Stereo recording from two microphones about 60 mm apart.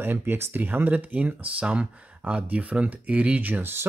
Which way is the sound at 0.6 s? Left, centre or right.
Right.